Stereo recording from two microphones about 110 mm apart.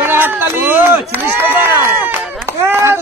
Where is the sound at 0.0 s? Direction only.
20° right (ahead or behind).